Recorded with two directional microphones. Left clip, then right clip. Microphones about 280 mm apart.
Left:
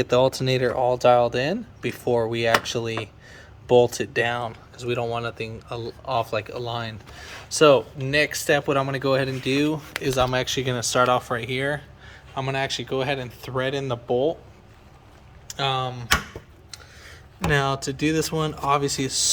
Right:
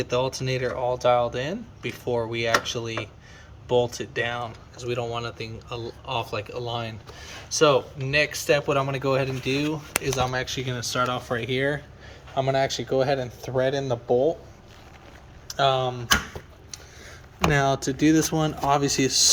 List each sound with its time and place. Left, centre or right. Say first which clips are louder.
0.0 s speech: left 6 dB; left
11.3 s speech: even; centre
13.8 s speech: right 2 dB; left
15.6 s speech: right 3 dB; centre
17.5 s speech: left 1 dB; centre